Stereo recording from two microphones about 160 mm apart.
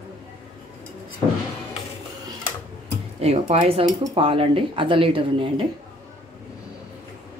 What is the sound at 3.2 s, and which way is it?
A man's voice, 40° right (ahead or behind).